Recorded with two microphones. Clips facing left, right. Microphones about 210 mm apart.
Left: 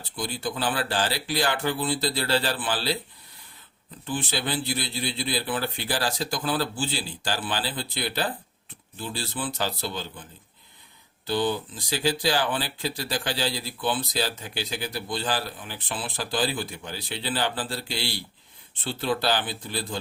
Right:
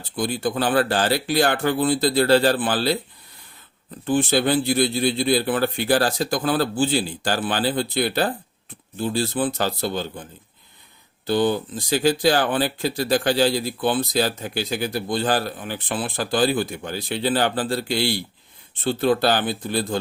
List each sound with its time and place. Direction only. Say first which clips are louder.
0.2 s speech: right 7 dB; 50° right (ahead or behind)
4.0 s speech: right 10 dB; 50° right (ahead or behind)
11.3 s speech: right 6 dB; 50° right (ahead or behind)